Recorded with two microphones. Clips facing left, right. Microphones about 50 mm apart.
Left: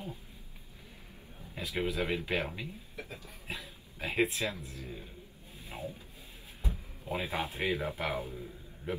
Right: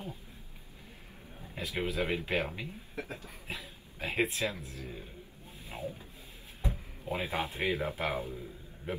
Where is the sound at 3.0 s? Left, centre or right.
Right.